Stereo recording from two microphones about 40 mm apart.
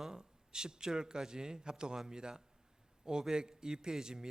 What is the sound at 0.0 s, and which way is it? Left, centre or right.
A man's voice, centre.